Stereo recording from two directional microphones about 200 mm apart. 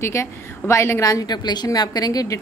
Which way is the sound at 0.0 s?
15° left (ahead or behind).